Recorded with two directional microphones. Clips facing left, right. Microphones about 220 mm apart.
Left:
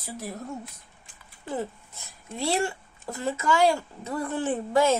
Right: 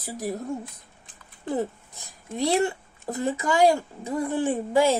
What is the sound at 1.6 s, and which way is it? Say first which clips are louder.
Speech: right 2 dB; 15° right (ahead or behind).